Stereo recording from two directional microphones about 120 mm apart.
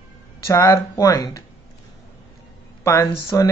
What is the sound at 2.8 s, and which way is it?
Speech, 25° left (ahead or behind).